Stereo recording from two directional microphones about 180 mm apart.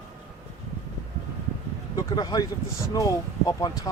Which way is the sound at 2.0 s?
25° left (ahead or behind).